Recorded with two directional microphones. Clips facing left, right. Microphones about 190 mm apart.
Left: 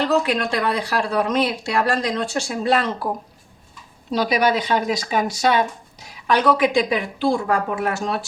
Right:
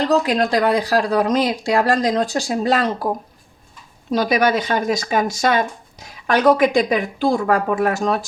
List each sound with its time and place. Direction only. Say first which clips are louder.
0.1 s speech: right 3 dB; 35° right (ahead or behind)
4.1 s speech: right 2 dB; 45° right (ahead or behind)